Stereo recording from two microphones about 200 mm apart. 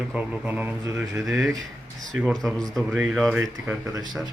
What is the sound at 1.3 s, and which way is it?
Speech, centre (ahead or behind).